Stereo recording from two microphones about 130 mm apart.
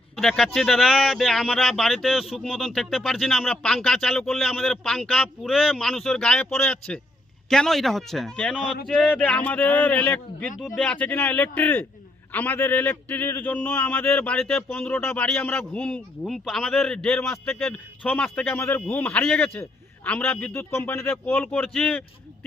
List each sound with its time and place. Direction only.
0.2 s a man's voice: 5° left (ahead or behind)